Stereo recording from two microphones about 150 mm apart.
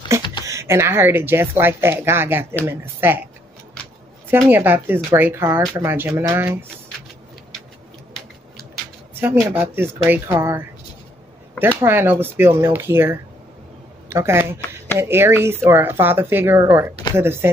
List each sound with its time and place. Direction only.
0.5 s speech: 20° right (ahead or behind)
4.3 s speech: 15° right (ahead or behind)
9.2 s speech: 15° right (ahead or behind)
11.8 s speech: 15° right (ahead or behind)